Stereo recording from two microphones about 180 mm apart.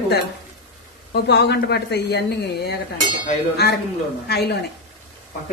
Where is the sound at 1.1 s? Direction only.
70° left (ahead or behind).